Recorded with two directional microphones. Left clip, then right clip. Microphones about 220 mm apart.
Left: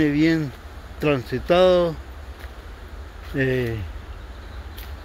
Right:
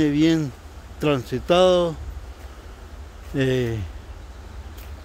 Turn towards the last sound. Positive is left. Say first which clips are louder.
# even
turn(degrees=-20)  # may be behind; listen again after turning